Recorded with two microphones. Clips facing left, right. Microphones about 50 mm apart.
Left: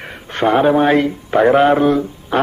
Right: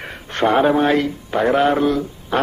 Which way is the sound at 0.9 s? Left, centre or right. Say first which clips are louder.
Left 4 dB; centre.